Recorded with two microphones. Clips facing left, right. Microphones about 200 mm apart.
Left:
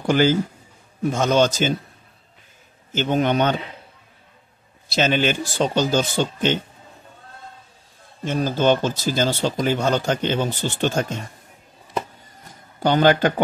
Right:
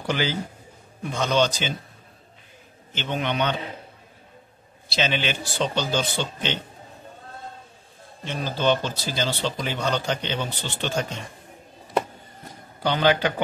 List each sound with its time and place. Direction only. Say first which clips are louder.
0.0 s speech: left 8 dB; 45° left (ahead or behind)
2.9 s speech: left 8 dB; 45° left (ahead or behind)
4.8 s speech: left 6 dB; 45° left (ahead or behind)
8.2 s speech: left 6 dB; 45° left (ahead or behind)
12.8 s speech: left 5 dB; 45° left (ahead or behind)